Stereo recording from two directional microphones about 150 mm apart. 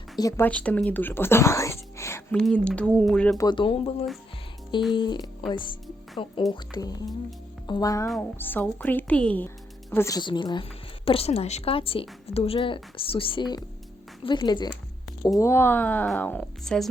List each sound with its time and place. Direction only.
0.2 s speech: 20° left (ahead or behind)
0.4 s speech: 10° left (ahead or behind)
2.3 s speech: 5° left (ahead or behind)
3.3 s a woman's voice: 30° left (ahead or behind)
4.9 s a woman's voice: 30° left (ahead or behind)
8.2 s speech: 10° left (ahead or behind)
10.2 s a woman's voice: 30° left (ahead or behind)
15.4 s speech: 15° left (ahead or behind)